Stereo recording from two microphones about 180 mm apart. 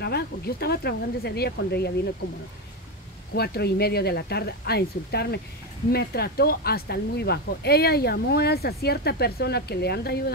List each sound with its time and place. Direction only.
0.0 s speech: 60° left (ahead or behind)
3.3 s speech: 60° left (ahead or behind)